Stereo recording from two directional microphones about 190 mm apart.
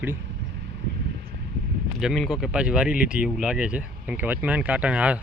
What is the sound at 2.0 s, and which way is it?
Speech, centre (ahead or behind).